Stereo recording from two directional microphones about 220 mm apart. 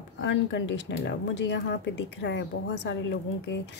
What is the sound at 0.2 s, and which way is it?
Speech, 55° left (ahead or behind).